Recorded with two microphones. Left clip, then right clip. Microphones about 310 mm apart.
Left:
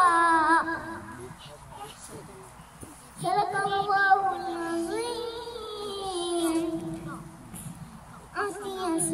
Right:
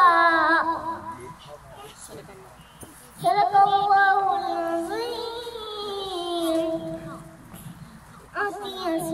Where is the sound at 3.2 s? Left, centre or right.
Centre.